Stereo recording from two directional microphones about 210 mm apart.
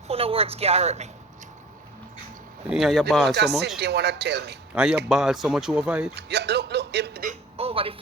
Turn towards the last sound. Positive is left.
turn(degrees=-25)  # may be behind; listen again after turning